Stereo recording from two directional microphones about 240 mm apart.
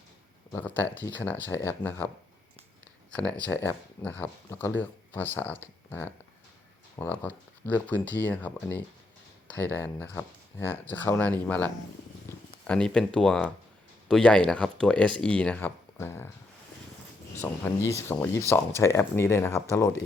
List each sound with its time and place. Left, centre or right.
0.5 s speech: centre
3.4 s speech: centre
7.2 s speech: centre
12.3 s purr: centre
12.6 s speech: centre
17.4 s speech: centre